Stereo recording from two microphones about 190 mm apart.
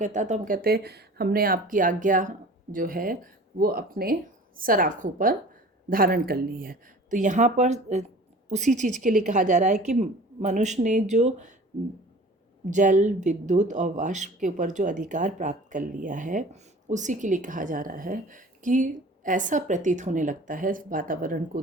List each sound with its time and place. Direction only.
0.0 s speech: 40° right (ahead or behind)
12.7 s speech: 40° right (ahead or behind)